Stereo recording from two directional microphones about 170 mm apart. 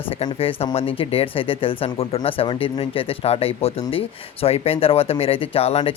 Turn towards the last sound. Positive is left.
turn(degrees=35)  # may be behind; listen again after turning